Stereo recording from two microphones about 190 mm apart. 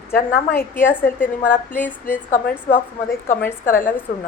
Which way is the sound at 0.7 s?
10° left (ahead or behind).